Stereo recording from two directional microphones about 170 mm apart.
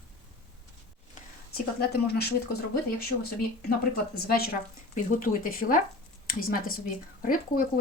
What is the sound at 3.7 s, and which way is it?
Speech, 65° left (ahead or behind).